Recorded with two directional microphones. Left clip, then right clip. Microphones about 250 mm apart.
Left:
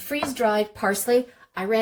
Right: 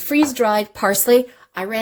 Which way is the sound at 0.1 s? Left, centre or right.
Right.